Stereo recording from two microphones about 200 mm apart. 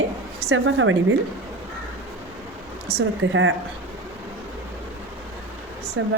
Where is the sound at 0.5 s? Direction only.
75° right (ahead or behind).